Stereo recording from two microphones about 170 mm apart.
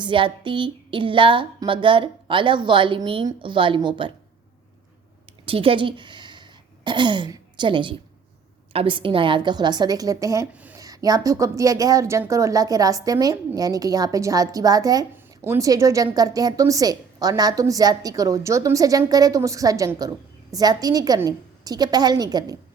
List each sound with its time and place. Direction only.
0.0 s a woman's voice: 30° right (ahead or behind)
5.5 s a woman's voice: 30° right (ahead or behind); by 10.8 s 10° right (ahead or behind)
10.8 s a woman's voice: 20° right (ahead or behind)